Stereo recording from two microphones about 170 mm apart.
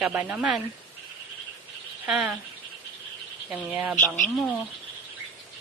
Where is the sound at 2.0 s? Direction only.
5° right (ahead or behind).